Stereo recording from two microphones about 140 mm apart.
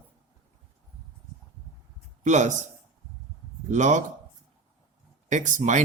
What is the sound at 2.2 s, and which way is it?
Speech, 60° right (ahead or behind).